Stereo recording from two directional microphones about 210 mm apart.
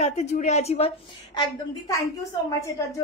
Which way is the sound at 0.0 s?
30° left (ahead or behind).